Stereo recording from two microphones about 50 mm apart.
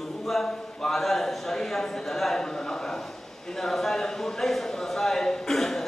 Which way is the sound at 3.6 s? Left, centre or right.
Centre.